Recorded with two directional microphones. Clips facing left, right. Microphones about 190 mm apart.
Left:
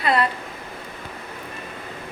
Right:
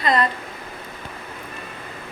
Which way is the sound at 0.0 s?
10° left (ahead or behind).